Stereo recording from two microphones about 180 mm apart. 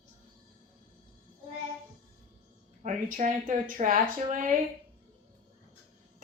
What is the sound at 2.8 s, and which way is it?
Speech, 45° right (ahead or behind).